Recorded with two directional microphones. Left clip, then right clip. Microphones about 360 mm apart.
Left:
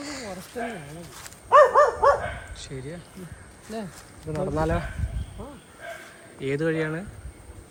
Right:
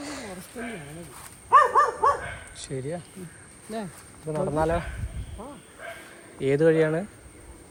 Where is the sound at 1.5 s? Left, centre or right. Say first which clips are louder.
Left 2 dB; left.